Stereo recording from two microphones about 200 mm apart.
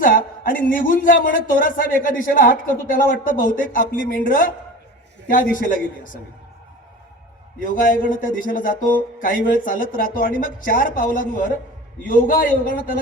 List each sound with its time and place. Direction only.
0.0 s a man's voice: 45° left (ahead or behind)
7.6 s a man's voice: 40° left (ahead or behind)